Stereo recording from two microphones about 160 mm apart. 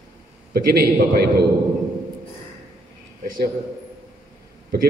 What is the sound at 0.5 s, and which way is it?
Speech, 65° right (ahead or behind).